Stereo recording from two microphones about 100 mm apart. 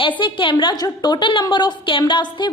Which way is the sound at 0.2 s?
55° left (ahead or behind).